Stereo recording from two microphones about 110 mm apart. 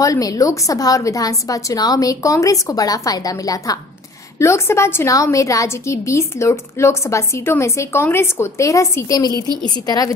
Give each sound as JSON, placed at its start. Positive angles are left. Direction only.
{"t": 0.0, "sound": "a woman's voice", "side_deg": 30}